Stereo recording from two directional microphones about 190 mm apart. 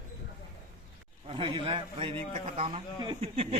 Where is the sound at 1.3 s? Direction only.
25° right (ahead or behind).